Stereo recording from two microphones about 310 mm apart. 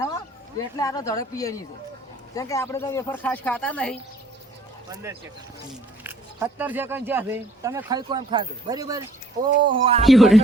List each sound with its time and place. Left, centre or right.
0.8 s a man's voice: centre
6.0 s speech: centre
10.1 s speech: centre